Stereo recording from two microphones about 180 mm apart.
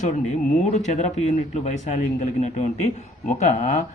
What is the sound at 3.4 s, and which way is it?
Speech, 40° left (ahead or behind).